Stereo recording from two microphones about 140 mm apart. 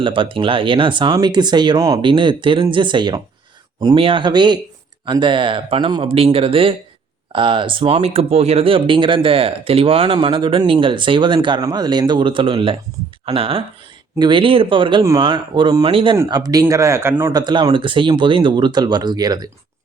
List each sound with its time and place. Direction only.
0.0 s speech: 40° right (ahead or behind)
16.1 s speech: 25° right (ahead or behind)
17.4 s speech: 35° right (ahead or behind)